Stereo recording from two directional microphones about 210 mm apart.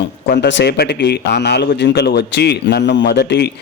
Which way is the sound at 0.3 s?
55° left (ahead or behind).